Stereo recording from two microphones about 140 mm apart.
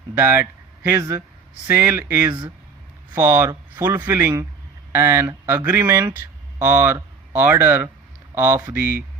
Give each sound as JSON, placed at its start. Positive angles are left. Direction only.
{"t": 0.1, "sound": "speech", "side_deg": -20}